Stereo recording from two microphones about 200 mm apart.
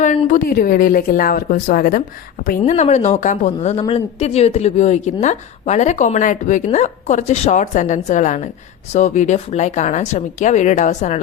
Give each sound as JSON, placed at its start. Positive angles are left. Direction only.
{"t": 0.0, "sound": "a woman's voice", "side_deg": 40}